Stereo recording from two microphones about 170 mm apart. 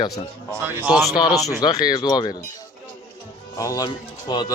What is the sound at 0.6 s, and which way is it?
Speech, 10° right (ahead or behind).